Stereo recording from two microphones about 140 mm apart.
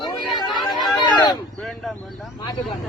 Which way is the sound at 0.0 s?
35° left (ahead or behind).